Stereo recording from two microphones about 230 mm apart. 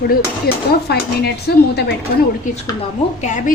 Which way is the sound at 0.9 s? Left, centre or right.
Left.